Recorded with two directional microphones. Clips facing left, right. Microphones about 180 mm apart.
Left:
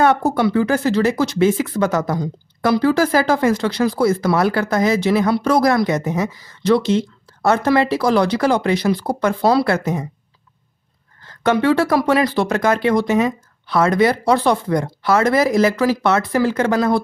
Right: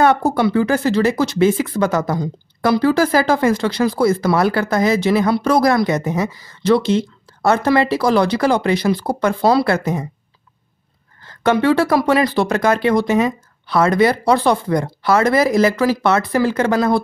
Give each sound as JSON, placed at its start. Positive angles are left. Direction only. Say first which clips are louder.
{"t": 0.0, "sound": "speech", "louder": "right 1 dB", "side_deg": -30}
{"t": 7.9, "sound": "speech", "louder": "right 1 dB", "side_deg": -30}
{"t": 11.4, "sound": "speech", "louder": "right 1 dB", "side_deg": -30}